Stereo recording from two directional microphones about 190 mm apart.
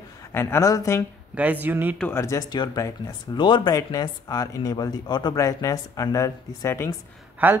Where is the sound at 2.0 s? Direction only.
10° left (ahead or behind).